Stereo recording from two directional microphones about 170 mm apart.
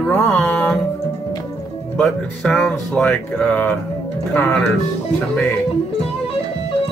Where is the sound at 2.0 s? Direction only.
5° left (ahead or behind).